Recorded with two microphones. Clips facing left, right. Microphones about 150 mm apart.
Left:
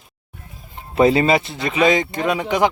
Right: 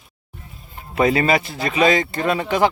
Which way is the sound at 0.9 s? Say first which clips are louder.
Left 3 dB; 30° left (ahead or behind).